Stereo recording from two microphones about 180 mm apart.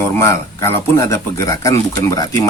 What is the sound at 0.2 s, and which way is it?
Speech, 15° left (ahead or behind).